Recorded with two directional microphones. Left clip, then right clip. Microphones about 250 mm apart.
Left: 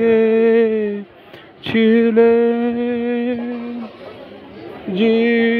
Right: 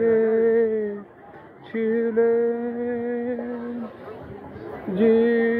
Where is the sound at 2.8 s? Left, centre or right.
Left.